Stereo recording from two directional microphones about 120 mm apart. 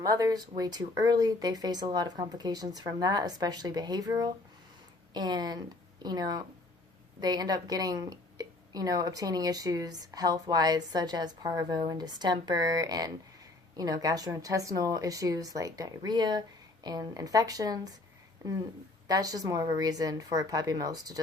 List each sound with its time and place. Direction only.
0.0 s a woman's voice: 30° right (ahead or behind)
19.0 s a woman's voice: 30° right (ahead or behind)